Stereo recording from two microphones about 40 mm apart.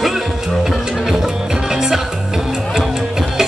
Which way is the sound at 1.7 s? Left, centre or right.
Centre.